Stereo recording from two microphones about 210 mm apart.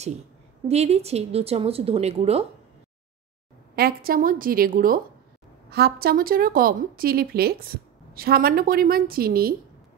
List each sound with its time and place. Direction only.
0.7 s speech: 30° right (ahead or behind)
3.7 s speech: 45° right (ahead or behind)